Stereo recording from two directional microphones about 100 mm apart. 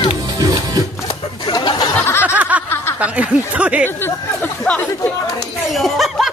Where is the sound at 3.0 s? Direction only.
15° right (ahead or behind).